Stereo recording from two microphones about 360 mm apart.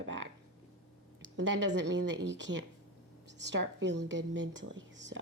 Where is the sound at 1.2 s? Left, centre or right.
Right.